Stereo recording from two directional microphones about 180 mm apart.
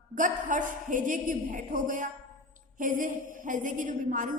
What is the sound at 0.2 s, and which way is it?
A woman's voice, 45° right (ahead or behind).